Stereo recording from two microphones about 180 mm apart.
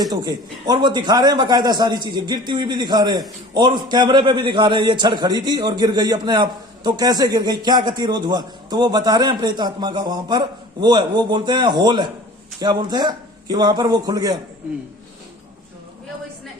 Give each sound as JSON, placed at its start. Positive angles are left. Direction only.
{"t": 0.0, "sound": "a man's voice", "side_deg": -20}